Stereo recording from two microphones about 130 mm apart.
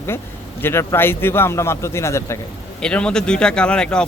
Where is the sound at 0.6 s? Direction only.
20° left (ahead or behind).